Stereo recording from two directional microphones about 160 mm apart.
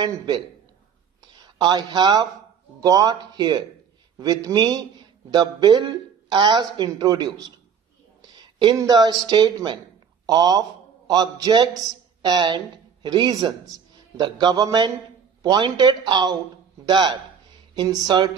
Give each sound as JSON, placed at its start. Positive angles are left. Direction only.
{"t": 1.4, "sound": "speech", "side_deg": -25}
{"t": 8.6, "sound": "a man's voice", "side_deg": -25}